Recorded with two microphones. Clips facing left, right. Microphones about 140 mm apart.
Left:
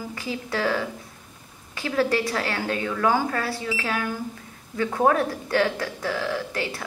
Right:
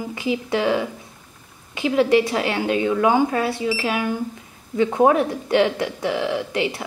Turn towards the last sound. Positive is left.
turn(degrees=-20)  # may be behind; listen again after turning